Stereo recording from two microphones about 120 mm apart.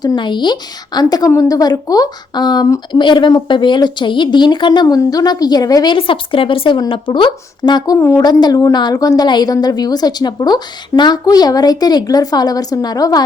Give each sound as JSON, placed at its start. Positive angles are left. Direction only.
{"t": 0.0, "sound": "a woman's voice", "side_deg": 40}
{"t": 2.9, "sound": "a woman's voice", "side_deg": 40}
{"t": 7.9, "sound": "a woman's voice", "side_deg": 20}
{"t": 8.2, "sound": "a woman's voice", "side_deg": 35}